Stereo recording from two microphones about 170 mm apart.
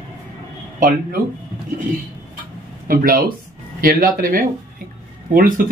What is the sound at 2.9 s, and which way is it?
A man's voice, 60° right (ahead or behind).